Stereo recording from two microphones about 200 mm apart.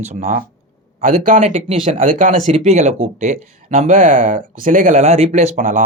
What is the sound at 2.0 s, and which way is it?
Speech, 40° right (ahead or behind).